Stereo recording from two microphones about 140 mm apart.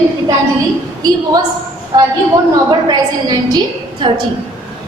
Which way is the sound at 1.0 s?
30° right (ahead or behind).